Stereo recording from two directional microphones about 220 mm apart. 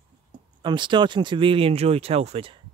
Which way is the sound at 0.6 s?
20° right (ahead or behind).